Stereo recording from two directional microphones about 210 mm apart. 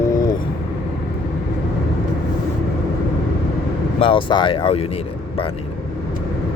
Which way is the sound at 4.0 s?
25° left (ahead or behind).